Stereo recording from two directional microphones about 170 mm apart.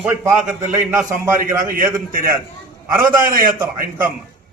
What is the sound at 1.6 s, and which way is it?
A man's voice, 55° right (ahead or behind).